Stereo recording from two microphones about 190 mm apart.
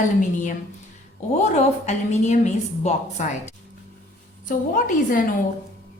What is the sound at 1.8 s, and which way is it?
A woman's voice, 35° left (ahead or behind).